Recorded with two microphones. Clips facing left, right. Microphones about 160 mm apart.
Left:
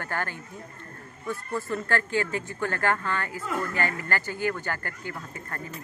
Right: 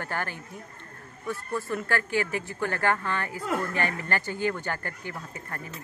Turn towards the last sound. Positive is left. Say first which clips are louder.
# left 1 dB
turn(degrees=-15)  # may be behind; listen again after turning